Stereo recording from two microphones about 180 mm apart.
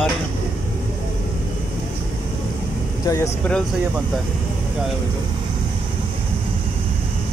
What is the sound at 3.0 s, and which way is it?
Speech, 20° left (ahead or behind).